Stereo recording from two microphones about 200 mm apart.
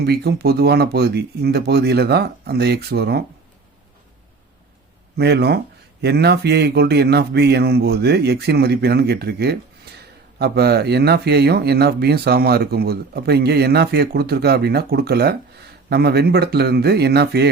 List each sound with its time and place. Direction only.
0.0 s speech: 55° right (ahead or behind)
5.1 s speech: 55° right (ahead or behind)